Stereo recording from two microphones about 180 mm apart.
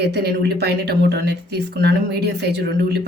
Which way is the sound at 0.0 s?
65° right (ahead or behind).